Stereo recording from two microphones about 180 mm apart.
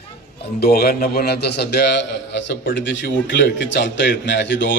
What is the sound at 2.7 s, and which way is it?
A man's voice, 90° left.